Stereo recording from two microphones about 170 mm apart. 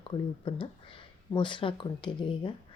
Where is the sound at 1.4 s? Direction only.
30° left (ahead or behind).